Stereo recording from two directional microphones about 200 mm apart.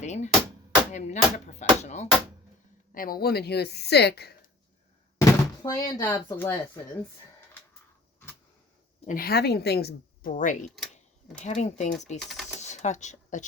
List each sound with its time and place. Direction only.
0.0 s hammer: 35° left (ahead or behind)
0.9 s a sound: 35° left (ahead or behind)
2.9 s a woman's voice: 45° left (ahead or behind)
5.4 s speech: 15° left (ahead or behind)
9.0 s a woman's voice: 45° left (ahead or behind)
10.7 s speech: centre (ahead or behind)
11.4 s a sound: 35° left (ahead or behind)
12.2 s speech: centre (ahead or behind)
12.5 s a sound: 35° left (ahead or behind)